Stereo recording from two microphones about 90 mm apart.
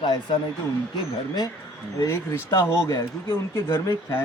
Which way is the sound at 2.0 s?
30° left (ahead or behind).